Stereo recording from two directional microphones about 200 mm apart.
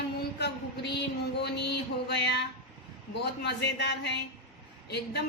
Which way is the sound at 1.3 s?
55° left (ahead or behind).